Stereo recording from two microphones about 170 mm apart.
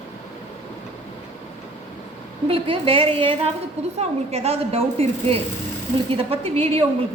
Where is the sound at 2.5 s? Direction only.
35° right (ahead or behind).